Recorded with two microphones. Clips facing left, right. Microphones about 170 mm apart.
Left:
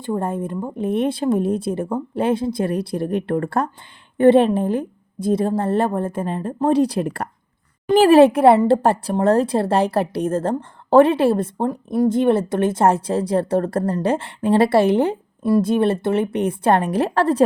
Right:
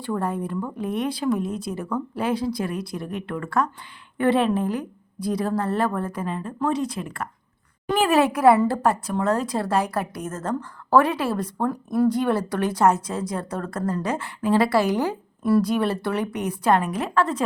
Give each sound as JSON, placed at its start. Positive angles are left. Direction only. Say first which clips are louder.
{"t": 0.0, "sound": "speech", "louder": "left 3 dB", "side_deg": 25}
{"t": 7.0, "sound": "speech", "louder": "left 10 dB", "side_deg": 45}
{"t": 7.9, "sound": "speech", "louder": "left 9 dB", "side_deg": 30}